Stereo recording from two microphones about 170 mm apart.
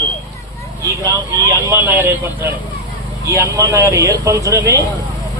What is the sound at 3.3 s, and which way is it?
Speech, 20° right (ahead or behind).